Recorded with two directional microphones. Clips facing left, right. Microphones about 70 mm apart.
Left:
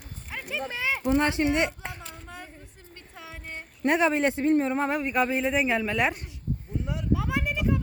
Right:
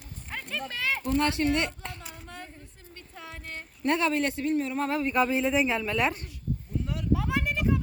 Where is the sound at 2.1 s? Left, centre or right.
Centre.